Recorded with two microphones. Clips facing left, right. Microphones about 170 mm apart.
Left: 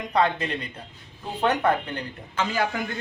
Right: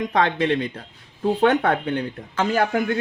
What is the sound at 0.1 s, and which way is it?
Speech, 90° right.